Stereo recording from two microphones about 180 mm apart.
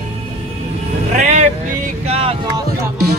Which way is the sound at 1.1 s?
40° right (ahead or behind).